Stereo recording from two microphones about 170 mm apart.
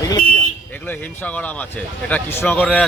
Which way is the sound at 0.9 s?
10° left (ahead or behind).